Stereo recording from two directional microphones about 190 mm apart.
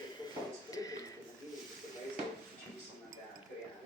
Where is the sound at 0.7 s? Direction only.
20° left (ahead or behind).